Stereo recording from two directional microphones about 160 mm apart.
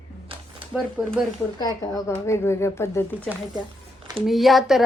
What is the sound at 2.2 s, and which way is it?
Speech, 15° left (ahead or behind).